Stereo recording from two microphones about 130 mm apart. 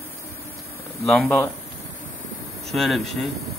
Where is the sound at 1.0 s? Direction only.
Centre (ahead or behind).